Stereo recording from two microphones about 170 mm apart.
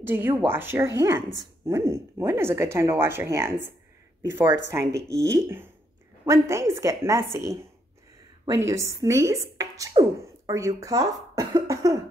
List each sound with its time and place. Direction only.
0.0 s speech: 10° right (ahead or behind)
8.5 s speech: 20° right (ahead or behind)